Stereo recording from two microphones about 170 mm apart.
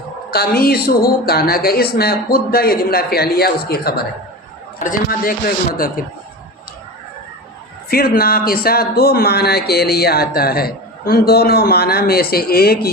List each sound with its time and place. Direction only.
0.3 s speech: 60° left (ahead or behind)
4.8 s speech: 55° left (ahead or behind)
7.9 s speech: 60° left (ahead or behind)